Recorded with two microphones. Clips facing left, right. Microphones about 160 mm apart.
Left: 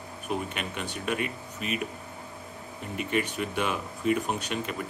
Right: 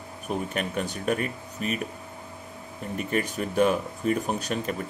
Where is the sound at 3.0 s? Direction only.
40° right (ahead or behind).